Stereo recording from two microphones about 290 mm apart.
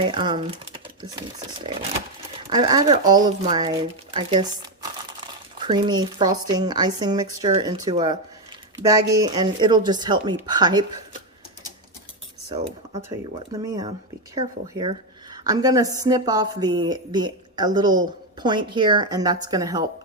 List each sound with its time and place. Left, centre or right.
0.0 s speech: centre
1.7 s speech: centre
12.5 s speech: right
13.5 s speech: centre